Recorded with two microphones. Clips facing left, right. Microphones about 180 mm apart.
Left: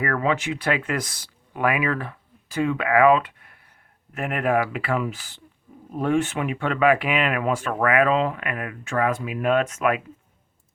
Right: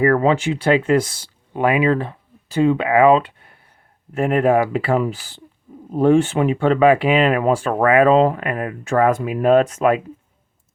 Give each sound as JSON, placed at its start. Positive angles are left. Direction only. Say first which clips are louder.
{"t": 0.0, "sound": "speech", "louder": "right 8 dB", "side_deg": -30}